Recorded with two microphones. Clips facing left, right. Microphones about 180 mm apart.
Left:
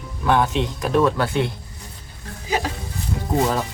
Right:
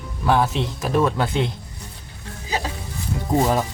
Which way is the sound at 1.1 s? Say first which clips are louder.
Left 1 dB; 20° right (ahead or behind).